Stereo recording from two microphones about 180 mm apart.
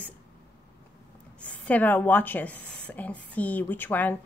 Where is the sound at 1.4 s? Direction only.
10° left (ahead or behind).